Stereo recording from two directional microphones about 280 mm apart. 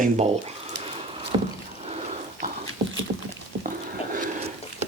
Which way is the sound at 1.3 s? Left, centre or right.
Centre.